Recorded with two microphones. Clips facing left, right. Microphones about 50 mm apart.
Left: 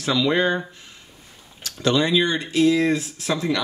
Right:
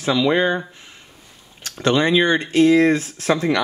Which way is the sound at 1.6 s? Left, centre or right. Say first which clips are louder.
Right 3 dB; right.